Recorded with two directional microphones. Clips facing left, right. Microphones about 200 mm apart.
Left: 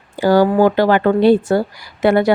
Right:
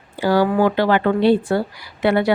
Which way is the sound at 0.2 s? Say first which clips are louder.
Left 4 dB; 45° left (ahead or behind).